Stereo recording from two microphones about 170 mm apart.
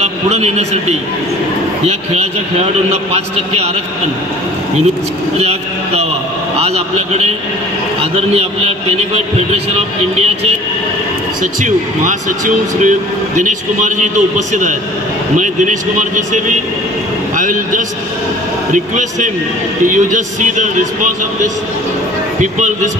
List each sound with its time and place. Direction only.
0.0 s a man's voice: 40° right (ahead or behind)
2.9 s a man's voice: 40° right (ahead or behind)
6.6 s a man's voice: 40° right (ahead or behind)
11.6 s a man's voice: 50° right (ahead or behind)
22.4 s a man's voice: 45° right (ahead or behind)